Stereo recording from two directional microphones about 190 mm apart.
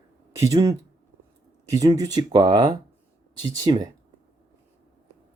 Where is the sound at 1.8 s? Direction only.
20° right (ahead or behind).